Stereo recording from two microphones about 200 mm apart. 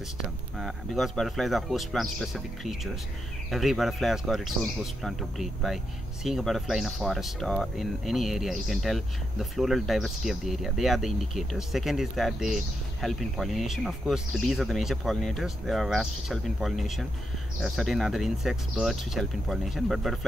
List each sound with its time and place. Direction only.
0.6 s speech: centre (ahead or behind)